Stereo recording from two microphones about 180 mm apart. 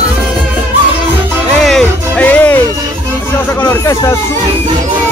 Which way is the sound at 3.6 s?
15° left (ahead or behind).